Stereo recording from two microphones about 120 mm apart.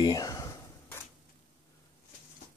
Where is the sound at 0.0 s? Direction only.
30° left (ahead or behind).